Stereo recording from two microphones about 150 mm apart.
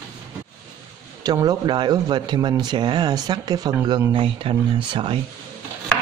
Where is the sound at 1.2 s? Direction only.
25° right (ahead or behind).